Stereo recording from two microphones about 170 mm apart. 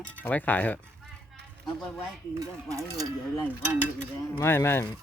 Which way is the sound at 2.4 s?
20° right (ahead or behind).